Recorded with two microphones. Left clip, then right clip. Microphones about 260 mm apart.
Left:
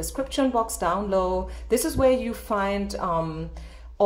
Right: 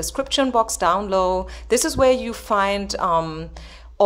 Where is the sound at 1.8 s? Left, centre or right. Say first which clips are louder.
Right 4 dB; right.